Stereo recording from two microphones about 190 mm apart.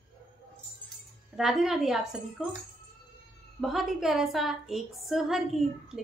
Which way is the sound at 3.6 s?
Centre (ahead or behind).